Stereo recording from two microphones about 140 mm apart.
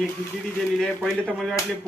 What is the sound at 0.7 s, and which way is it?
Speech, 5° left (ahead or behind).